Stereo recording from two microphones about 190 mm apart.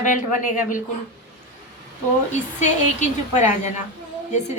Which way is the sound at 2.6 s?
40° left (ahead or behind).